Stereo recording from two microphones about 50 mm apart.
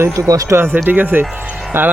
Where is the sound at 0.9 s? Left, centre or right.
Right.